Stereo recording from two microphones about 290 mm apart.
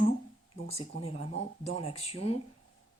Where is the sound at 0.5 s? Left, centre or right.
Centre.